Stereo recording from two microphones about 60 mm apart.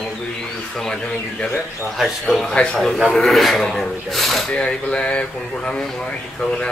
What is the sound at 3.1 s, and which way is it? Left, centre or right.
A man's voice, centre.